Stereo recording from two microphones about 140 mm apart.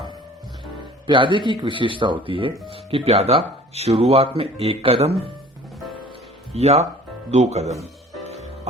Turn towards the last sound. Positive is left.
turn(degrees=-50)  # may be behind; listen again after turning